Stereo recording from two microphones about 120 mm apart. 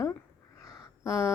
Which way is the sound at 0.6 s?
25° left (ahead or behind).